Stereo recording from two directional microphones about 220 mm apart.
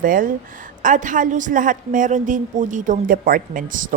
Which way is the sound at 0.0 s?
40° right (ahead or behind).